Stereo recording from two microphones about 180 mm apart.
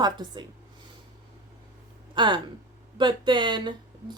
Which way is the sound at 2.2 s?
25° right (ahead or behind).